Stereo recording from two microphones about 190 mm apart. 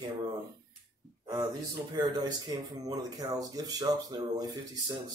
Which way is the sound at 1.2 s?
20° right (ahead or behind).